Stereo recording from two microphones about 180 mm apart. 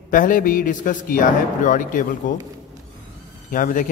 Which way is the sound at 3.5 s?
50° left (ahead or behind).